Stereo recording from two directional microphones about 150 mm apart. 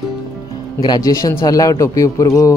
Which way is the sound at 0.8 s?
25° left (ahead or behind).